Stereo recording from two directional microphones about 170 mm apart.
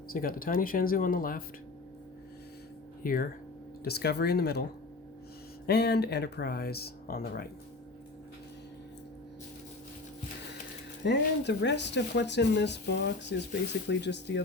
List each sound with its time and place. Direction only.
0.1 s speech: 55° left (ahead or behind)
3.0 s speech: 55° left (ahead or behind)
3.8 s speech: 70° left (ahead or behind)
5.6 s speech: 75° left (ahead or behind)
11.0 s speech: 90° left